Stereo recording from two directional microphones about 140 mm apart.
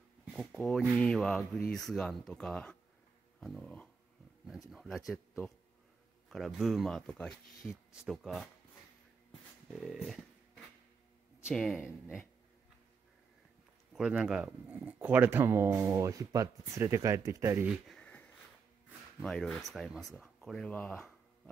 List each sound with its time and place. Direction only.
0.2 s a sound: 5° right (ahead or behind)
0.6 s speech: 5° left (ahead or behind)
6.2 s speech: centre (ahead or behind)
9.7 s speech: centre (ahead or behind)
11.4 s speech: centre (ahead or behind)
13.9 s speech: 5° right (ahead or behind)
17.6 s a sound: 5° left (ahead or behind)
19.1 s speech: 5° left (ahead or behind)